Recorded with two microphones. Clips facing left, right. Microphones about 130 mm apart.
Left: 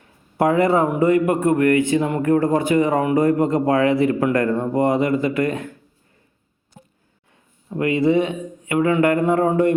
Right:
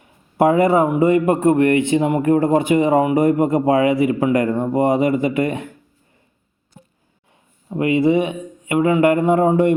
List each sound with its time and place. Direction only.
0.0 s a man's voice: 20° right (ahead or behind)
7.7 s a man's voice: 20° right (ahead or behind)